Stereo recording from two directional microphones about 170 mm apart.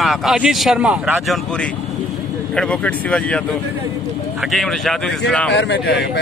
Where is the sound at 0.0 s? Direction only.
Centre (ahead or behind).